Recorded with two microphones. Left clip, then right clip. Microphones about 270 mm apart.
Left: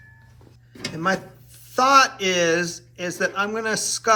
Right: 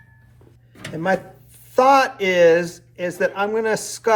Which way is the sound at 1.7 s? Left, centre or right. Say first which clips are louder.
Right 1 dB; centre.